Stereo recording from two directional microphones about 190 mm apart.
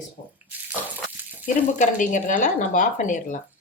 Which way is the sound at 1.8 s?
40° left (ahead or behind).